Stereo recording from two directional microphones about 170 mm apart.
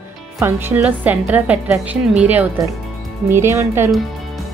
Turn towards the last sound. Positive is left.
turn(degrees=-15)  # may be behind; listen again after turning